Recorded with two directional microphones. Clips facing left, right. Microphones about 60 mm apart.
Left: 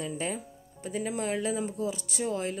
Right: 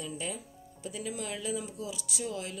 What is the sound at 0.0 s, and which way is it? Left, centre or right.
Speech, left.